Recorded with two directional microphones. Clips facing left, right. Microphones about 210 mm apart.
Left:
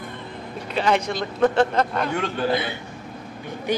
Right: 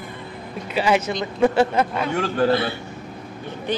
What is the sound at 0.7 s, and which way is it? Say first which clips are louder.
A woman's voice: right 1 dB; 5° right (ahead or behind).